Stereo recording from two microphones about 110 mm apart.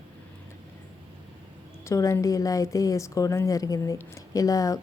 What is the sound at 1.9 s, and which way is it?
Speech, 30° left (ahead or behind).